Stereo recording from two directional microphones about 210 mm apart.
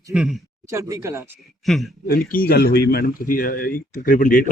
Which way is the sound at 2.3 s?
45° left (ahead or behind).